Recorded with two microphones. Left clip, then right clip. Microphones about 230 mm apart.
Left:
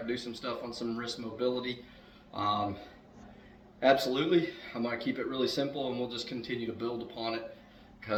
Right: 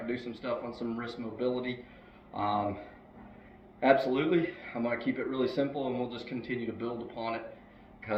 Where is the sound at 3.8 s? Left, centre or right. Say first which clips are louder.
Right 1 dB; centre.